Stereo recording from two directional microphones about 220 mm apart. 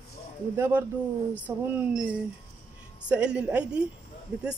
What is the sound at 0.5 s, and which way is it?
Speech, 10° right (ahead or behind).